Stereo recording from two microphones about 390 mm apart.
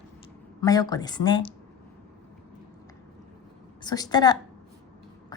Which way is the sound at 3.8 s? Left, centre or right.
Centre.